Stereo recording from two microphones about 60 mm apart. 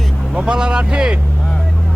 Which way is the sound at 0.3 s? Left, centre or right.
Centre.